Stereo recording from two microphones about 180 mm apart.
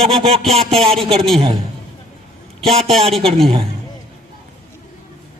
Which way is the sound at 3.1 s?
Centre (ahead or behind).